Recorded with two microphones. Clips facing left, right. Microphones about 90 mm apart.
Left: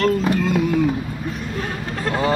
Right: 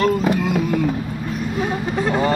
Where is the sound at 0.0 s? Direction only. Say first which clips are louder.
Right 1 dB; 10° right (ahead or behind).